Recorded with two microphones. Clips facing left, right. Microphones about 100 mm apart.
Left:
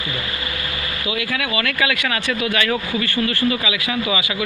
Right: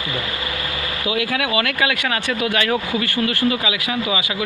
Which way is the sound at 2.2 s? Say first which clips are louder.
Even; 45° right (ahead or behind).